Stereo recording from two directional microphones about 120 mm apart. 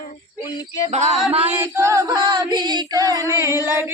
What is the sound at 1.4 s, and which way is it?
Male singing, 20° right (ahead or behind).